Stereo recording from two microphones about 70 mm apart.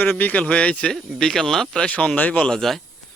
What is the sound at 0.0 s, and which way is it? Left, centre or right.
Speech, left.